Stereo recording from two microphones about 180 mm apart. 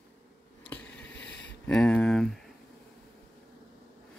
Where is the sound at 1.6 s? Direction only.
5° left (ahead or behind).